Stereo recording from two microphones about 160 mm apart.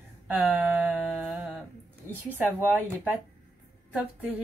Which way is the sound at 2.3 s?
10° right (ahead or behind).